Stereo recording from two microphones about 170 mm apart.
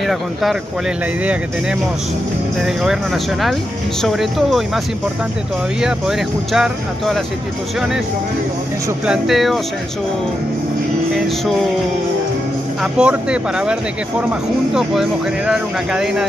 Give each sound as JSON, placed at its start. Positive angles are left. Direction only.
{"t": 0.0, "sound": "speech", "side_deg": 0}
{"t": 9.0, "sound": "speech", "side_deg": -5}
{"t": 11.1, "sound": "speech", "side_deg": 0}
{"t": 12.8, "sound": "speech", "side_deg": -5}